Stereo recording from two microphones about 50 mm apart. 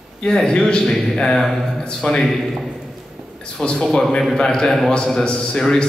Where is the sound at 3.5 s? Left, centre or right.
Centre.